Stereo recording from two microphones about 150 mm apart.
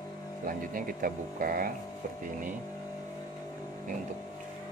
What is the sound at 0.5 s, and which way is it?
Speech, 70° right (ahead or behind).